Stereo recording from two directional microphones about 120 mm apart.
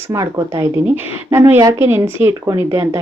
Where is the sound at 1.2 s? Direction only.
30° right (ahead or behind).